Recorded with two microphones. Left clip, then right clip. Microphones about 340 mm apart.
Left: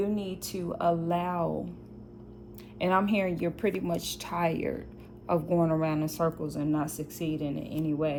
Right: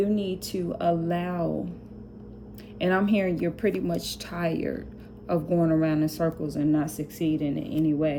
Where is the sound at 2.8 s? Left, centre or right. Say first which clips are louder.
Right 2 dB; centre.